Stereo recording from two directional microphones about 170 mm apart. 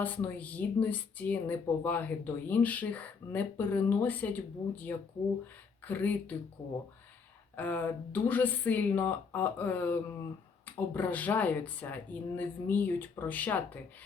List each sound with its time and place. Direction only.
0.0 s speech: 10° left (ahead or behind)
7.5 s speech: 10° left (ahead or behind)